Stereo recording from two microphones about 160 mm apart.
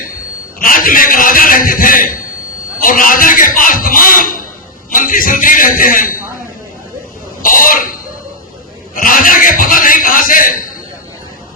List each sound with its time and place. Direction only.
0.6 s a man's voice: 60° left (ahead or behind)
3.8 s a sound: 60° left (ahead or behind)
4.9 s a man's voice: 60° left (ahead or behind)
7.4 s speech: 60° left (ahead or behind)
9.0 s a man's voice: 60° left (ahead or behind)